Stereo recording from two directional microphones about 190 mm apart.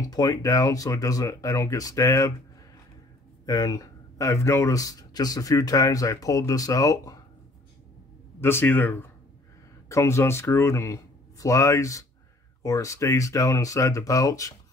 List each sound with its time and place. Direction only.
0.1 s speech: 20° left (ahead or behind)
3.4 s speech: 20° left (ahead or behind)
8.4 s speech: 10° left (ahead or behind)